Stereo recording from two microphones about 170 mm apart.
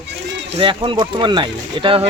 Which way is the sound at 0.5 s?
30° right (ahead or behind).